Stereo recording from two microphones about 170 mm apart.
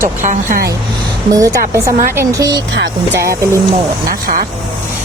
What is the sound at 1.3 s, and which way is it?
Speech, 20° right (ahead or behind).